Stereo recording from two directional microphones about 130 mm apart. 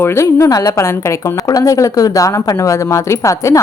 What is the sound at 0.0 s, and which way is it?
A woman's voice, 20° left (ahead or behind).